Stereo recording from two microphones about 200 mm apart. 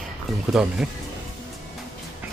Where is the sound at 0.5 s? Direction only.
5° right (ahead or behind).